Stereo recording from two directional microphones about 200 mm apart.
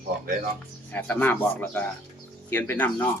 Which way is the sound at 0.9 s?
10° left (ahead or behind).